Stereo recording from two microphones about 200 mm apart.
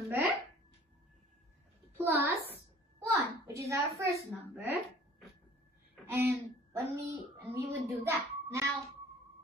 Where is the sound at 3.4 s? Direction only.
15° right (ahead or behind).